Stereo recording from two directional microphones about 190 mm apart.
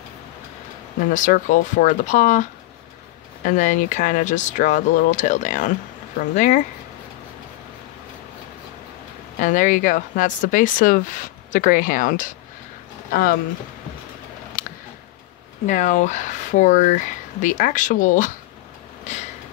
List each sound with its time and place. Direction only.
1.1 s speech: 40° left (ahead or behind)
3.4 s speech: 40° left (ahead or behind)
9.4 s speech: 40° left (ahead or behind)
14.6 s tick: 50° left (ahead or behind)
15.6 s speech: 40° left (ahead or behind)